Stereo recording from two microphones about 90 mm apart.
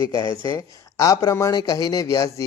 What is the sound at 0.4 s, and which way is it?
Speech, 40° left (ahead or behind).